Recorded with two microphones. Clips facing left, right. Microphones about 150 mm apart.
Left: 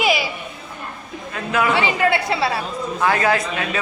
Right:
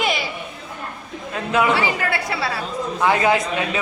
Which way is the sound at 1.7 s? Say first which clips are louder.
Left 4 dB; 20° left (ahead or behind).